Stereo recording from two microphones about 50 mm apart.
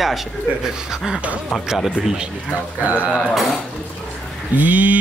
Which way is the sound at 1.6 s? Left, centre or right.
Centre.